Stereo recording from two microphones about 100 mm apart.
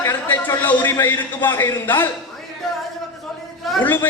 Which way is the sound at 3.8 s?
20° left (ahead or behind).